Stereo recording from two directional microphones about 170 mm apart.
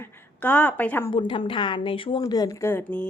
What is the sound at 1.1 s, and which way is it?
Speech, 30° left (ahead or behind).